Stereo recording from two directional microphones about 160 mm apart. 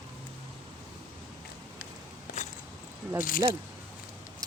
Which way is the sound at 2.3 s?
65° left (ahead or behind).